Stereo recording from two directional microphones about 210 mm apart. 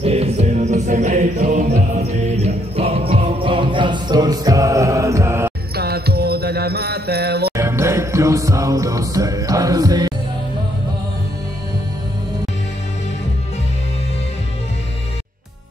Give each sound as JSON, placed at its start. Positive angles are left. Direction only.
{"t": 0.0, "sound": "music", "side_deg": -30}
{"t": 5.8, "sound": "music", "side_deg": -50}
{"t": 7.5, "sound": "music", "side_deg": -15}